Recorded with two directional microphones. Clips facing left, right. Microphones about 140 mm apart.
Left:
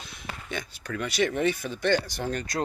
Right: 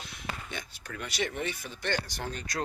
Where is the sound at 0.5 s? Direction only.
90° left.